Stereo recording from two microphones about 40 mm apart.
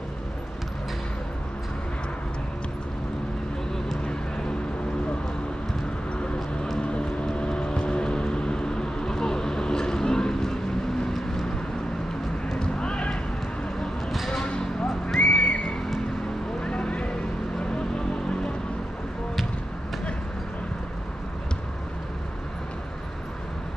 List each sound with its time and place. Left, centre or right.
6.2 s music: left
6.8 s vehicle: left
12.5 s vehicle: left
14.3 s a sound: centre
15.1 s a sound: left
16.6 s vehicle: left